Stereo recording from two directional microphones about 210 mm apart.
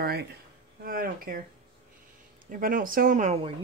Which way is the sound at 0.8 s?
45° right (ahead or behind).